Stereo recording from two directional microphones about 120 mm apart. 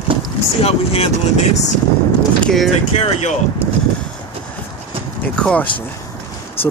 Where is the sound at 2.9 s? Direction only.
65° left (ahead or behind).